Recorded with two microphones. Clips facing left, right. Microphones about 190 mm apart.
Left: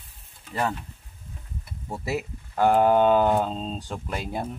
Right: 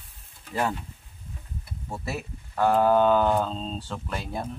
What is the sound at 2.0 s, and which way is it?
Speech, 15° left (ahead or behind).